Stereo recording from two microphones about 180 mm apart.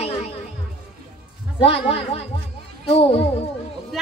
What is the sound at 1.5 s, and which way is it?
A woman's voice, 35° left (ahead or behind).